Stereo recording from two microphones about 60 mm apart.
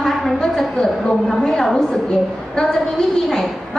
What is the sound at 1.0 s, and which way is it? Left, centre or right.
A woman's voice, centre.